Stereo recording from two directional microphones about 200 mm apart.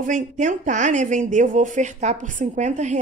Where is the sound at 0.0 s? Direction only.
40° right (ahead or behind).